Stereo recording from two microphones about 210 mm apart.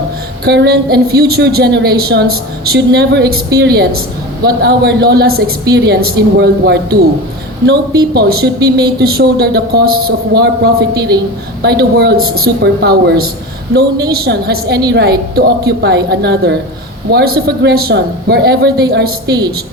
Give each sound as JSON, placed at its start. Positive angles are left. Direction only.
{"t": 0.4, "sound": "speech", "side_deg": -50}